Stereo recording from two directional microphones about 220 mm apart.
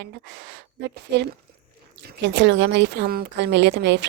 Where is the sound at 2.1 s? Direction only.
50° right (ahead or behind).